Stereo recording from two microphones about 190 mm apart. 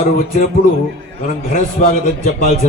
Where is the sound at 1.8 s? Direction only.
40° left (ahead or behind).